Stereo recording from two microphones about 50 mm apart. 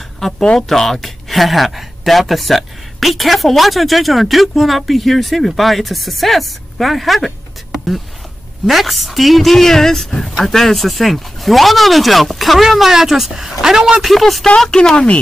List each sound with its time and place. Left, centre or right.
0.2 s speech: centre
14.0 s speech: centre